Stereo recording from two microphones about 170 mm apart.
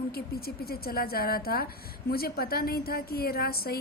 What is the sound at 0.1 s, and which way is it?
A woman's voice, 65° left (ahead or behind).